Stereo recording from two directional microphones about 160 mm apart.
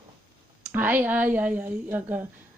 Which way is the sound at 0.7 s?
10° right (ahead or behind).